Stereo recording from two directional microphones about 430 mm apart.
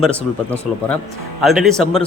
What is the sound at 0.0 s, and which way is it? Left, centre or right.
A man's voice, centre.